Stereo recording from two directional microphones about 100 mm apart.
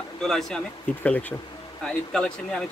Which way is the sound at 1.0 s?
15° left (ahead or behind).